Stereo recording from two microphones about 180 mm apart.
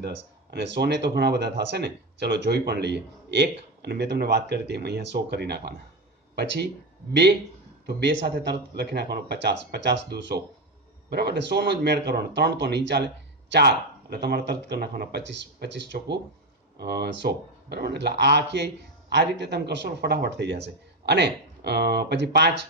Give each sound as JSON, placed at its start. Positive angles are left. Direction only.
{"t": 0.0, "sound": "speech", "side_deg": -70}
{"t": 7.8, "sound": "speech", "side_deg": -70}